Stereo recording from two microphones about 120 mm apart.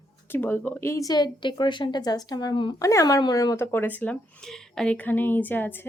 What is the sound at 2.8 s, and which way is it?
Speech, 25° left (ahead or behind).